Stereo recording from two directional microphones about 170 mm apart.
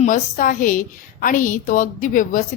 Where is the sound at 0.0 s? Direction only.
50° left (ahead or behind).